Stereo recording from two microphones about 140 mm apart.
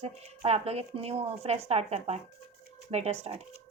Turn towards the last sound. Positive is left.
turn(degrees=-45)  # may be behind; listen again after turning